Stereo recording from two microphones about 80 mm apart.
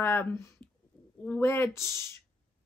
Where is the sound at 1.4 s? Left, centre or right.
Left.